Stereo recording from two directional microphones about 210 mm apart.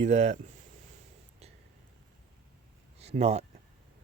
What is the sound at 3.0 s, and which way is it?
Speech, 30° right (ahead or behind).